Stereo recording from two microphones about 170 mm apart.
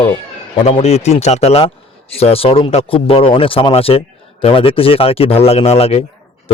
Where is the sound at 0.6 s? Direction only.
40° left (ahead or behind).